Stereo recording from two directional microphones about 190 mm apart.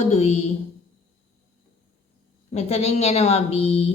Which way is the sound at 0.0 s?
35° left (ahead or behind).